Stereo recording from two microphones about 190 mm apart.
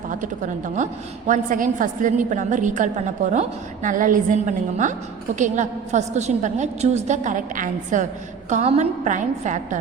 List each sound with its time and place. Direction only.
0.1 s a woman's voice: 40° right (ahead or behind)